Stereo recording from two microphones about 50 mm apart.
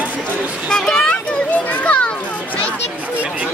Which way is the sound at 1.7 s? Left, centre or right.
Left.